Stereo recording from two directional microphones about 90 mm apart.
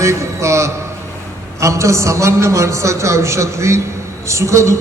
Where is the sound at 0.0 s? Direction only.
35° right (ahead or behind).